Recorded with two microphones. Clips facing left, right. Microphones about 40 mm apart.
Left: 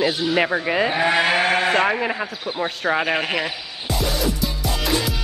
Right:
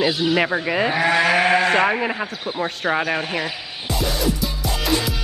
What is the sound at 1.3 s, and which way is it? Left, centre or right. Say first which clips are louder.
Sheep: right 2 dB; left.